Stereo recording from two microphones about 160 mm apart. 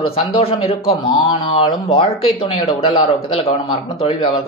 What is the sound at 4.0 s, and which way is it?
Speech, 40° left (ahead or behind).